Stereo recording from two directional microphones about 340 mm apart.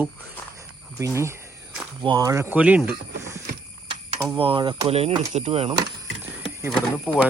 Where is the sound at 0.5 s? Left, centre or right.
Centre.